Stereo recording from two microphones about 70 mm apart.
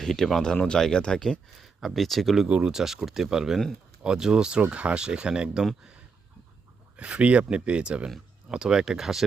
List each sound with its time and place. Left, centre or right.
0.0 s speech: centre
2.5 s speech: centre
2.7 s speech: centre
6.9 s speech: centre